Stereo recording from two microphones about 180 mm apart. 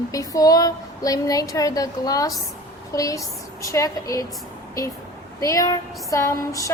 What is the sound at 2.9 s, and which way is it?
Speech, 20° left (ahead or behind).